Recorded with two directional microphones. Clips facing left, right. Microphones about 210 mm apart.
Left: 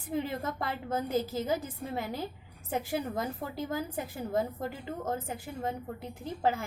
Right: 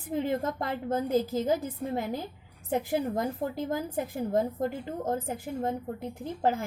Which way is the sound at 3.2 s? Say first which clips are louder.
Right 4 dB; 50° right (ahead or behind).